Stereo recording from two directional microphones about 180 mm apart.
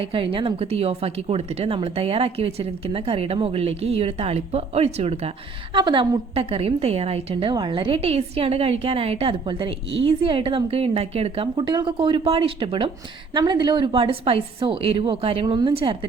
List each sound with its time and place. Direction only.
0.0 s a woman's voice: 30° right (ahead or behind)